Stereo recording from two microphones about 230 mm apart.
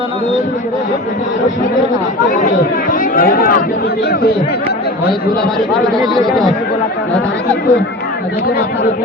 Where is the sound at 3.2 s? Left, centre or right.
Left.